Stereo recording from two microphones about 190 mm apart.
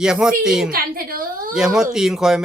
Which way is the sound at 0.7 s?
50° right (ahead or behind).